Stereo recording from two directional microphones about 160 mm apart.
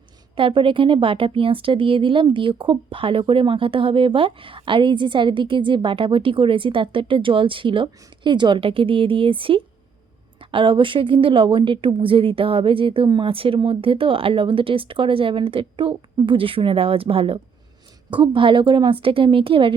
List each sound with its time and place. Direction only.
0.3 s a woman's voice: 35° right (ahead or behind)